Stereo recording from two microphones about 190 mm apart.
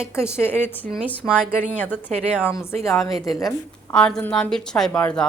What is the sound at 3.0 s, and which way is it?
A woman's voice, centre (ahead or behind).